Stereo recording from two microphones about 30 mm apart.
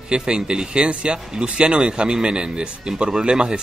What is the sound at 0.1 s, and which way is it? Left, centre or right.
Speech, right.